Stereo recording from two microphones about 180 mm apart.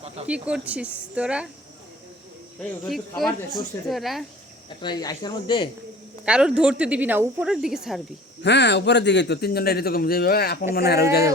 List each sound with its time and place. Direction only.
0.3 s speech: 5° right (ahead or behind)
2.6 s speech: centre (ahead or behind)
4.8 s speech: 25° left (ahead or behind)
6.2 s a man's voice: 5° right (ahead or behind)
8.4 s a man's voice: 75° left (ahead or behind)